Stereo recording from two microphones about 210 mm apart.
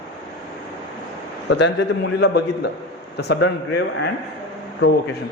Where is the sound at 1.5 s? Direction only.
55° left (ahead or behind).